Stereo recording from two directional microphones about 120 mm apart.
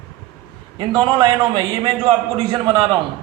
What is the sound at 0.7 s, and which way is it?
A man's voice, 45° right (ahead or behind).